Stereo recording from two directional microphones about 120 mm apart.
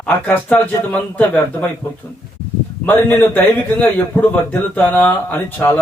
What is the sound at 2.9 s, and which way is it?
A man's voice, 15° left (ahead or behind).